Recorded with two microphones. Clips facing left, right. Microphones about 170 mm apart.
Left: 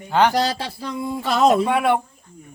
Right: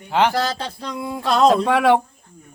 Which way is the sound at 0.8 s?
5° left (ahead or behind).